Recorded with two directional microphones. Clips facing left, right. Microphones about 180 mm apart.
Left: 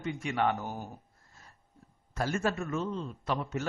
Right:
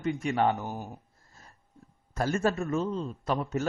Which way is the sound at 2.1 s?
40° right (ahead or behind).